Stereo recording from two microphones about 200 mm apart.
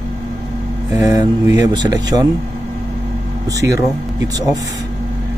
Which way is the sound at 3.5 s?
15° right (ahead or behind).